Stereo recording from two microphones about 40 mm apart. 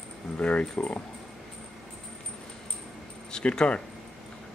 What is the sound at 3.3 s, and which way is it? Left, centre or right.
Speech, left.